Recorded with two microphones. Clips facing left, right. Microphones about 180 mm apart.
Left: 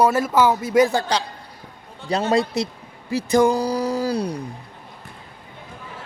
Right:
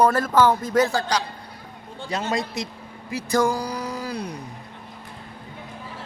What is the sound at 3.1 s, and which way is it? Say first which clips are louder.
Speech: left 5 dB; 20° left (ahead or behind).